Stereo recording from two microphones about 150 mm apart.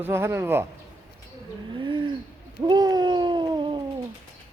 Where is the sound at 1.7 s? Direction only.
30° right (ahead or behind).